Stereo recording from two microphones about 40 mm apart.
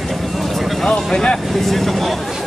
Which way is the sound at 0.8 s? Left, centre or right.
Centre.